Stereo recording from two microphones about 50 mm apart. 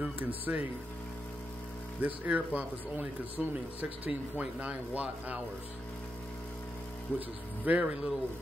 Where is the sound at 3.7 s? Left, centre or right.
Right.